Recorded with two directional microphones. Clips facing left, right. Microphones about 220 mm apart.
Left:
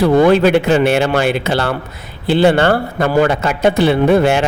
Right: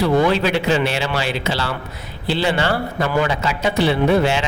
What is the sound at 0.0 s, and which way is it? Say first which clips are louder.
A man's voice: left 6 dB; 50° left (ahead or behind).